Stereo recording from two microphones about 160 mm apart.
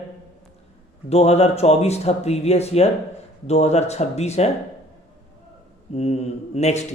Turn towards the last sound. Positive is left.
turn(degrees=45)  # may be behind; listen again after turning